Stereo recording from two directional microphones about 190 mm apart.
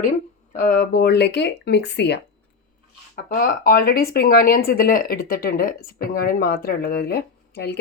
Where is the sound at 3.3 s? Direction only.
50° left (ahead or behind).